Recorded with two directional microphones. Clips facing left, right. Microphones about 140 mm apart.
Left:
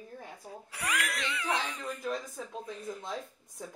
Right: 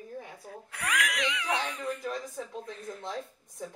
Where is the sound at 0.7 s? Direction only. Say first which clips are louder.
Right 2 dB; 5° left (ahead or behind).